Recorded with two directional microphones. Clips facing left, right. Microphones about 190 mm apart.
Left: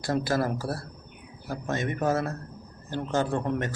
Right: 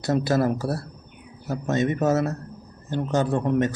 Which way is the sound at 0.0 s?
20° right (ahead or behind).